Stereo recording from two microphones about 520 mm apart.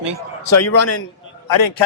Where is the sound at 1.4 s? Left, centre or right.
Left.